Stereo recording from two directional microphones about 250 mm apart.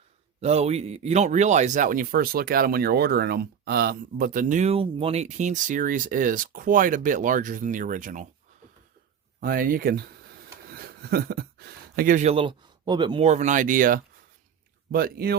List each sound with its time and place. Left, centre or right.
0.4 s speech: right
9.4 s speech: right